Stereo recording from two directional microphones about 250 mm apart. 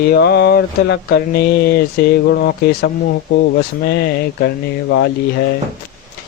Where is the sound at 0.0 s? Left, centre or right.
Left.